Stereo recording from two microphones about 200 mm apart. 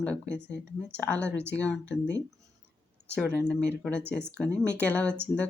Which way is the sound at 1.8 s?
65° left (ahead or behind).